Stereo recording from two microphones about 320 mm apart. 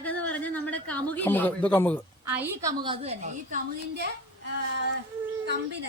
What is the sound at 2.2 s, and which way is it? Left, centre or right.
A woman's voice, centre.